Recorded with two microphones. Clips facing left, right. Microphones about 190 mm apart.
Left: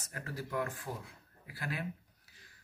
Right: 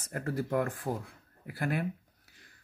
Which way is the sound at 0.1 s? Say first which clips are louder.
Right 8 dB; 55° right (ahead or behind).